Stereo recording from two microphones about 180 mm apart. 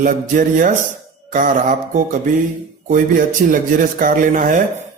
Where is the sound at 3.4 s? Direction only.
50° right (ahead or behind).